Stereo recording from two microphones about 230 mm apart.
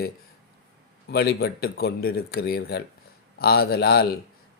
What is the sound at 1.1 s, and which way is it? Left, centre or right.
Speech, left.